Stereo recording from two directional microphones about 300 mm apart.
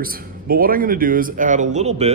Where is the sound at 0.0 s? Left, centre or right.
Right.